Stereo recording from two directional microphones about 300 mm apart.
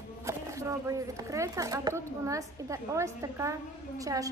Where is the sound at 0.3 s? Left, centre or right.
Centre.